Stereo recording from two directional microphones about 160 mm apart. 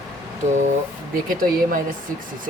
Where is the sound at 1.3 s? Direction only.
60° right (ahead or behind).